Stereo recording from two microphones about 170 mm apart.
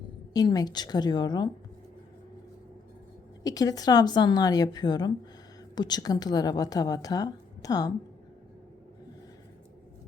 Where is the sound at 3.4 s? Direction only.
20° left (ahead or behind).